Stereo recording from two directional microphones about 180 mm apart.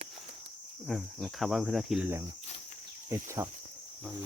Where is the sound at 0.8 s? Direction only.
Centre (ahead or behind).